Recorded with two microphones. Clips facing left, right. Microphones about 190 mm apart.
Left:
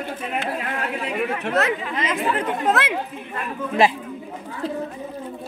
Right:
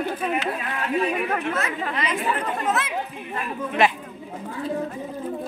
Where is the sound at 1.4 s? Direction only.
70° left (ahead or behind).